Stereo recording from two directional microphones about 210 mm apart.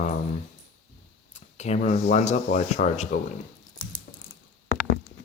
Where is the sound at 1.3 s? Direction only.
30° left (ahead or behind).